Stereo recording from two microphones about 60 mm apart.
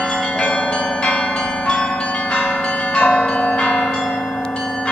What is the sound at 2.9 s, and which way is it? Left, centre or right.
Change ringing, left.